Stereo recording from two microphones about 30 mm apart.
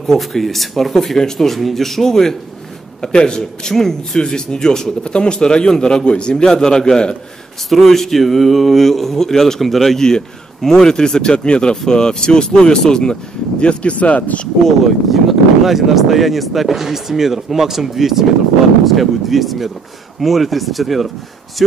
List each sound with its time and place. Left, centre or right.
0.2 s speech: centre
2.0 s speech: centre
3.0 s speech: left
3.7 s speech: centre
4.2 s speech: left
5.0 s speech: left
6.3 s speech: left
7.7 s speech: centre
9.6 s speech: centre
9.9 s speech: centre; by 14.4 s left
15.0 s speech: centre